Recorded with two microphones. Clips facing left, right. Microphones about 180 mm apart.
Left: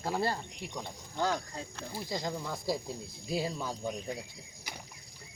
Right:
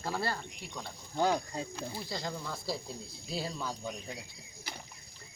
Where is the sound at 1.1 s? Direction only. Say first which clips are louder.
Right 3 dB; 15° right (ahead or behind).